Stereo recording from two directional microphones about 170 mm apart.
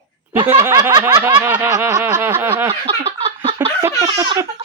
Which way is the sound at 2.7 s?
35° right (ahead or behind).